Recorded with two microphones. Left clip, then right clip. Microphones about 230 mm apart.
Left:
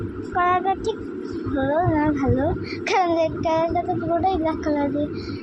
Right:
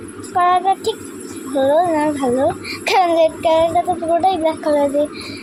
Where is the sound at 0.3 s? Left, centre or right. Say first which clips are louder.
Right 6 dB; right.